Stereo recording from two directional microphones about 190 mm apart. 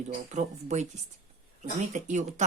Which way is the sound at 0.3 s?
35° right (ahead or behind).